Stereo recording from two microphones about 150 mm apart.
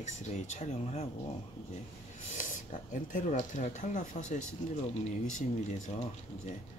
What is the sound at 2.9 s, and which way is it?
Speech, 60° left (ahead or behind).